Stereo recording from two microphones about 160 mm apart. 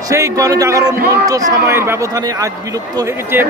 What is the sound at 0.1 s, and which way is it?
Speech, 20° right (ahead or behind).